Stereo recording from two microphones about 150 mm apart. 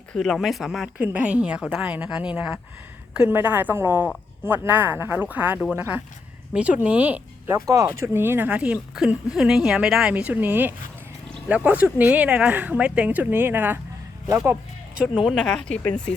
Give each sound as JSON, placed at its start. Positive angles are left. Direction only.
{"t": 0.1, "sound": "speech", "side_deg": 0}
{"t": 7.5, "sound": "speech", "side_deg": -20}